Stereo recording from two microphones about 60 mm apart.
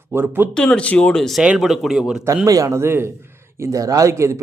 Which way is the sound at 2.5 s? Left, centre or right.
Right.